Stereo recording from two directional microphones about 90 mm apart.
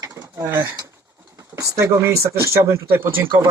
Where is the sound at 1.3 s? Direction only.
35° right (ahead or behind).